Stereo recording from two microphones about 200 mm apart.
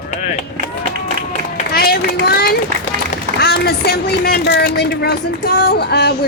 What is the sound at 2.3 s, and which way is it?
Speech, 50° left (ahead or behind).